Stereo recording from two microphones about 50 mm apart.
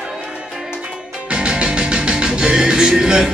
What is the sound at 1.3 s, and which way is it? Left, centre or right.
Music, centre.